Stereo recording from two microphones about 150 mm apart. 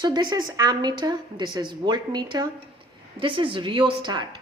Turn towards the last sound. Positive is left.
turn(degrees=-30)  # may be behind; listen again after turning